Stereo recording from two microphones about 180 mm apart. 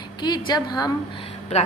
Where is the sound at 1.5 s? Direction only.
35° left (ahead or behind).